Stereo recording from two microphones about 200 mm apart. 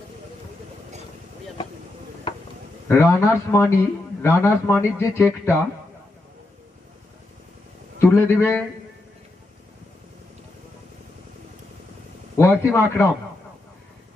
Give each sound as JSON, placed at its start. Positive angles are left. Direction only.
{"t": 2.3, "sound": "a sound", "side_deg": 25}
{"t": 2.9, "sound": "a man's voice", "side_deg": 15}
{"t": 8.0, "sound": "a man's voice", "side_deg": 10}
{"t": 12.4, "sound": "a man's voice", "side_deg": 10}